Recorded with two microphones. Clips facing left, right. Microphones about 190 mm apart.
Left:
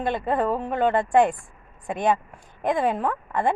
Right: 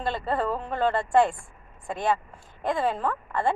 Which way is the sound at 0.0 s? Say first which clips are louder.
Left 4 dB; 15° left (ahead or behind).